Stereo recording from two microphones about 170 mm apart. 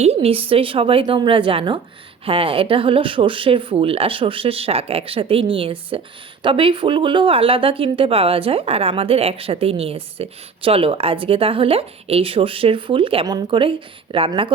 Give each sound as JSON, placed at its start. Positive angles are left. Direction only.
{"t": 0.0, "sound": "speech", "side_deg": -35}